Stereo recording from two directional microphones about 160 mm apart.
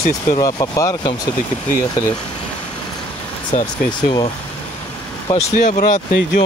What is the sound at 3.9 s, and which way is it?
Speech, 30° left (ahead or behind).